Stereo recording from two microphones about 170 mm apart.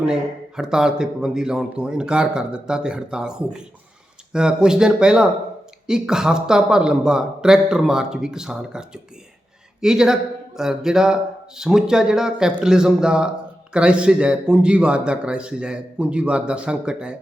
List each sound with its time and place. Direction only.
0.0 s a man's voice: 5° right (ahead or behind)